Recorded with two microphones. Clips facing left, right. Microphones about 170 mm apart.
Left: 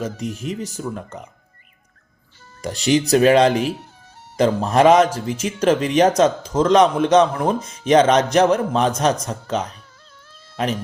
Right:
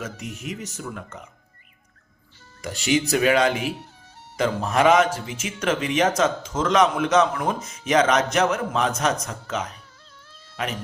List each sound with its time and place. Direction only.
0.0 s a man's voice: 35° left (ahead or behind)
2.6 s a man's voice: 35° left (ahead or behind)